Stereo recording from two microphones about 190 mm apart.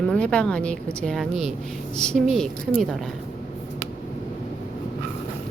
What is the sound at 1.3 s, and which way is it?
Speech, 35° right (ahead or behind).